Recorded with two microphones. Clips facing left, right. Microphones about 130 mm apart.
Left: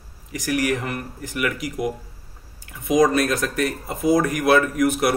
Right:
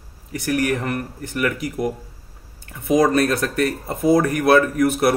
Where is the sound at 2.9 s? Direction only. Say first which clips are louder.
Right 1 dB; 30° right (ahead or behind).